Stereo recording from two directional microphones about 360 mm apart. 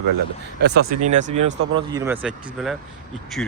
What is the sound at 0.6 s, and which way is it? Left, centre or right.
Speech, right.